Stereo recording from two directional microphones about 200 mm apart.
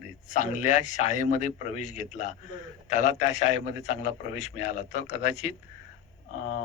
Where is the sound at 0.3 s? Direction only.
35° left (ahead or behind).